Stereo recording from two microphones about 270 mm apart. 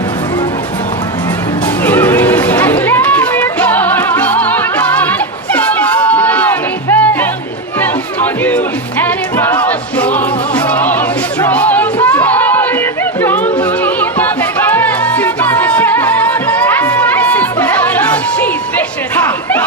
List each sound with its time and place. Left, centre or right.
1.8 s music: centre